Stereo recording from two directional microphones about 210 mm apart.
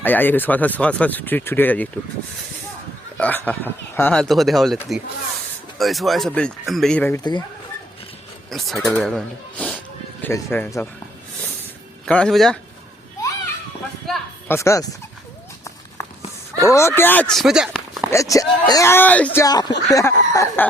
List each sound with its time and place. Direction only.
0.0 s speech: 10° left (ahead or behind)
3.2 s speech: 5° left (ahead or behind)
7.2 s speech: 20° left (ahead or behind)
8.4 s speech: centre (ahead or behind)
12.0 s speech: 5° left (ahead or behind)
14.1 s a sound: 10° left (ahead or behind)
16.6 s speech: 15° left (ahead or behind); by 18.1 s 5° right (ahead or behind)
18.1 s speech: 15° left (ahead or behind)